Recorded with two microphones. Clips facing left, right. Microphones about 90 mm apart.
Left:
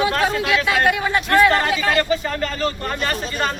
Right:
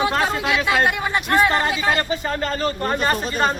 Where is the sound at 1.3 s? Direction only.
20° right (ahead or behind).